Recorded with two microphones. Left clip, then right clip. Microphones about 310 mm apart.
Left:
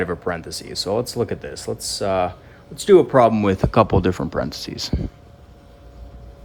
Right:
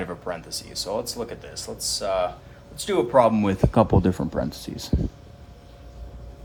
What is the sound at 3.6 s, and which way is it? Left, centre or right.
Speech, right.